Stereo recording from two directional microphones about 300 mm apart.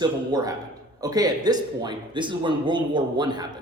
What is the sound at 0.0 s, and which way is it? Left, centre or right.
A man's voice, centre.